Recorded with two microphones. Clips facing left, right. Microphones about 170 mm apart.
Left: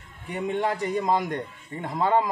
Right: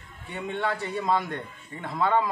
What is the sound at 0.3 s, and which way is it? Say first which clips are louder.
A man's voice: left 3 dB; 15° left (ahead or behind).